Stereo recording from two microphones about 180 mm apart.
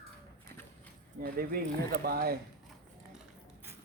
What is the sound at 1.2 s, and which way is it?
Speech, 55° right (ahead or behind).